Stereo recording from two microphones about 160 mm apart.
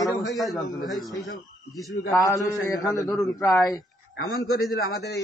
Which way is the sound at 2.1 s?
20° left (ahead or behind).